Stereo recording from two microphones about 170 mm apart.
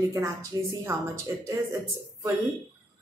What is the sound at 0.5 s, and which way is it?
Speech, 20° right (ahead or behind).